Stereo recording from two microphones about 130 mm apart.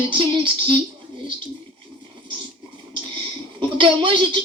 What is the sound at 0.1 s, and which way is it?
Speech, 40° right (ahead or behind).